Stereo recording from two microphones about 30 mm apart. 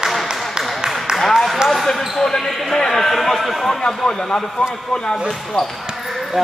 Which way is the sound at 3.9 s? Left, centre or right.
Centre.